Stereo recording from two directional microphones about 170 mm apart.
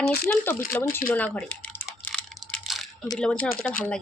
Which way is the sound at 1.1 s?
10° left (ahead or behind).